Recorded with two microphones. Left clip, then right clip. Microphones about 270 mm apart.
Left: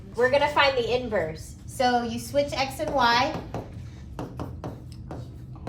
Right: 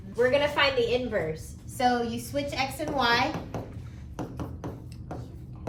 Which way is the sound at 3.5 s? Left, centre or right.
Centre.